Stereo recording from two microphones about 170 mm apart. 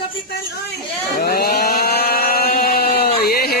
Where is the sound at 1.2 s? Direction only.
65° left (ahead or behind).